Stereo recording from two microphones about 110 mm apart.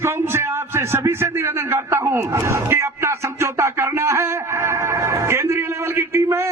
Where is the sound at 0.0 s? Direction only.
20° right (ahead or behind).